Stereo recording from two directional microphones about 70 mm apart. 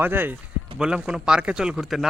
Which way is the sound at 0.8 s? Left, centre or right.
Centre.